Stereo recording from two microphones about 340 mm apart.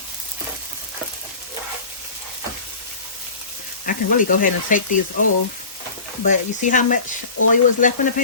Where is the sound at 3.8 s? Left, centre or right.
Left.